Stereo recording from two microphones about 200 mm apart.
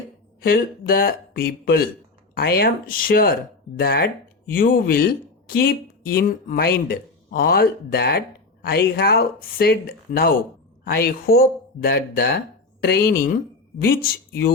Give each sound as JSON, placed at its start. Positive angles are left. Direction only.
{"t": 0.4, "sound": "speech", "side_deg": 45}